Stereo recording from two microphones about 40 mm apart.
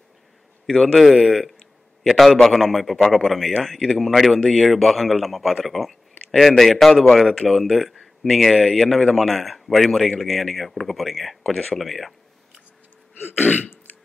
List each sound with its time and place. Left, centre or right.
0.9 s a man's voice: centre
13.2 s throat clearing: left